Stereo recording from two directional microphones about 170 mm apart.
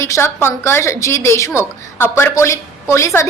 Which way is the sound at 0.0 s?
15° left (ahead or behind).